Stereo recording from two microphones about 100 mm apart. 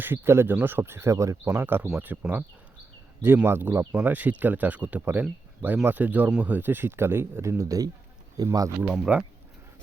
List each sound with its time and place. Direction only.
0.0 s speech: 20° right (ahead or behind)
1.5 s speech: 20° right (ahead or behind); by 8.5 s 40° right (ahead or behind)
8.8 s speech: 10° right (ahead or behind)